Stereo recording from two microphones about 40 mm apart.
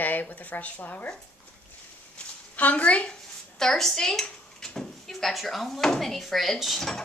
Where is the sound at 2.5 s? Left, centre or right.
Left.